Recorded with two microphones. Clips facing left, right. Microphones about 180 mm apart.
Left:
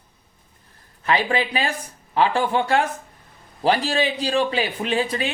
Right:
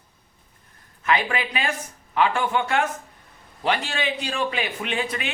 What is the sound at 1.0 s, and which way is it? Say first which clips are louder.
Speech: left 2 dB; 30° left (ahead or behind).